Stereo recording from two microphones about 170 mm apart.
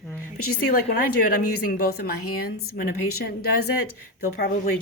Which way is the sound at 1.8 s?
65° left (ahead or behind).